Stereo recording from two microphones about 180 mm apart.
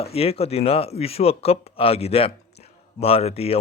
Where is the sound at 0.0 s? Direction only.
35° left (ahead or behind).